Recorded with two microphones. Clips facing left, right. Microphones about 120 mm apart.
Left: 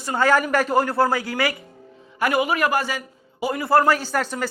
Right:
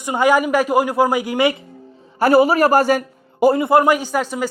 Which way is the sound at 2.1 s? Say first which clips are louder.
Right 8 dB; 35° right (ahead or behind).